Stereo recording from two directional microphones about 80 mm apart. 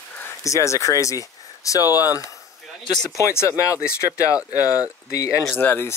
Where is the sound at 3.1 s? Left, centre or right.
Left.